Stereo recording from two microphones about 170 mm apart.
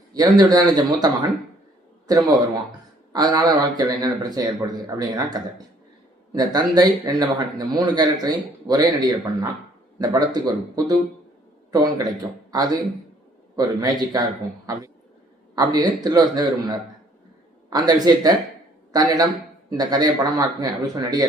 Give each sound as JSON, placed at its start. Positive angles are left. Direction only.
{"t": 0.1, "sound": "speech", "side_deg": -20}
{"t": 13.6, "sound": "speech", "side_deg": -25}